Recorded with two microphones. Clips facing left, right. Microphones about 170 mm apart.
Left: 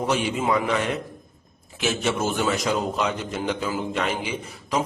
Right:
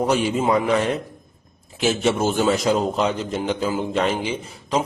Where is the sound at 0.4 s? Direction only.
35° right (ahead or behind).